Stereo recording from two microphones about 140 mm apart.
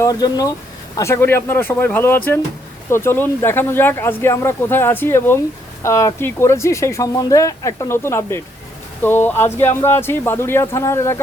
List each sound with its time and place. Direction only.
0.0 s speech: 25° left (ahead or behind)